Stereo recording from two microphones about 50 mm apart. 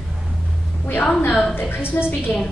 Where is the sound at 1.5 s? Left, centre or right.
Left.